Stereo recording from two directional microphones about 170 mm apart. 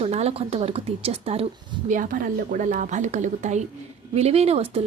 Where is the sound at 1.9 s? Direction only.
50° right (ahead or behind); by 4.8 s 35° right (ahead or behind).